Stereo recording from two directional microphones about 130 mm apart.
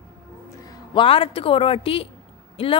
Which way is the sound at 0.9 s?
40° left (ahead or behind).